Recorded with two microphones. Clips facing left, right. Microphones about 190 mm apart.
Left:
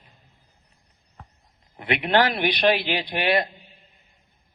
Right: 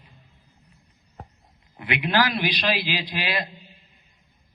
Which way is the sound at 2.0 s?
60° left (ahead or behind).